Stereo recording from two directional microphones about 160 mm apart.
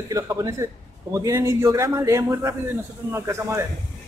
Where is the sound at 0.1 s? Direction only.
20° right (ahead or behind).